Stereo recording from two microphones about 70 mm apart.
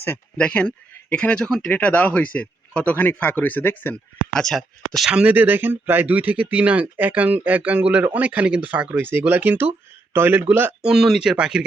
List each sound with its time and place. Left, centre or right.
0.3 s speech: centre
1.5 s speech: centre
1.7 s speech: centre
4.4 s speech: centre
5.1 s speech: right
10.8 s speech: centre